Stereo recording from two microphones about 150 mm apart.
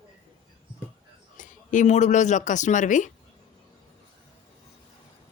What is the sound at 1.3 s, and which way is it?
Speech, 60° left (ahead or behind).